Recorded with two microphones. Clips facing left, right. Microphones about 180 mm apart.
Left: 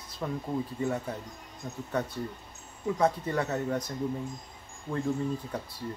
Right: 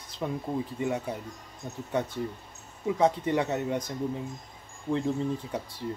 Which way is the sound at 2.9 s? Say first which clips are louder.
Right 2 dB; 20° right (ahead or behind).